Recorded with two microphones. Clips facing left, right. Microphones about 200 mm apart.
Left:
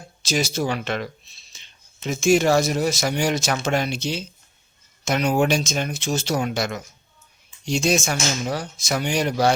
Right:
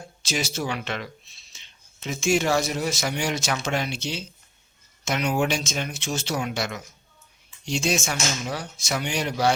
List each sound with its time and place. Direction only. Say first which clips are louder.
0.2 s speech: left 5 dB; 40° left (ahead or behind)
1.5 s a sound: left 2 dB; 40° left (ahead or behind)
2.0 s speech: left 5 dB; 40° left (ahead or behind)